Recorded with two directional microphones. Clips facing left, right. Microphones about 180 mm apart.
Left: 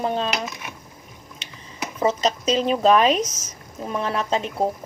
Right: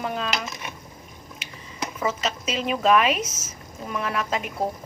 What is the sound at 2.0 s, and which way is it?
A woman's voice, 35° left (ahead or behind).